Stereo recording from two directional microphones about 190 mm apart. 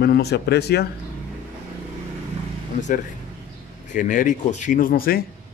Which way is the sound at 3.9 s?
45° left (ahead or behind).